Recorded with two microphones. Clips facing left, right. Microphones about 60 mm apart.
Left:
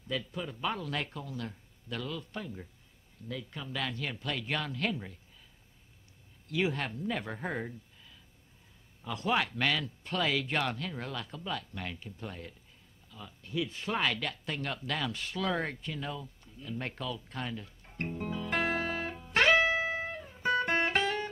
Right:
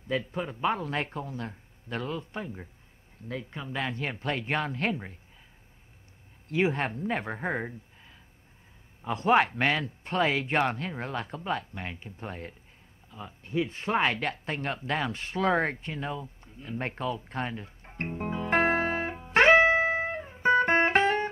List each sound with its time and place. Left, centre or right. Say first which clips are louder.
0.1 s speech: right 5 dB; right
6.5 s speech: right 5 dB; right
13.1 s a sound: right 5 dB; right